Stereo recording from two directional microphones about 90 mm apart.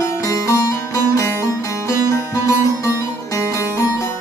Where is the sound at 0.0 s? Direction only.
35° left (ahead or behind).